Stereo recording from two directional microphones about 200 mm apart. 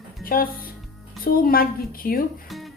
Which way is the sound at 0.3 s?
45° left (ahead or behind).